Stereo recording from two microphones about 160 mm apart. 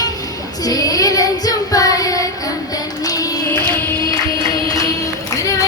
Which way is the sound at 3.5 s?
10° left (ahead or behind).